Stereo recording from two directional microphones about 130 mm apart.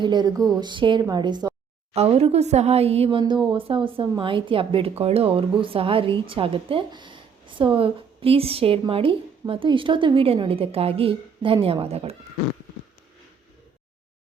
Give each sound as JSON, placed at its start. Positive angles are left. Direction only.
{"t": 0.0, "sound": "a woman's voice", "side_deg": -35}
{"t": 1.9, "sound": "a woman's voice", "side_deg": -50}